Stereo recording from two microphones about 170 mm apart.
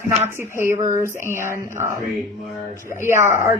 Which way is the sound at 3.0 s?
15° right (ahead or behind).